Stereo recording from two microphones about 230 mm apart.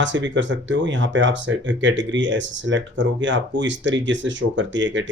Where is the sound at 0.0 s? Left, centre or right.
Right.